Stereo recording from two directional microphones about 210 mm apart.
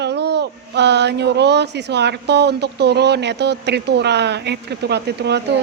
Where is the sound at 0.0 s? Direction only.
55° right (ahead or behind).